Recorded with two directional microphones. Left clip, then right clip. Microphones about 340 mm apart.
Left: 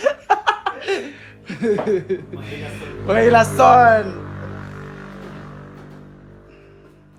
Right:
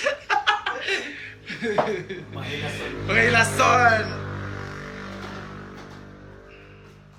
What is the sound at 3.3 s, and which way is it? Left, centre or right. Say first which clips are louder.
Music: left 9 dB; centre.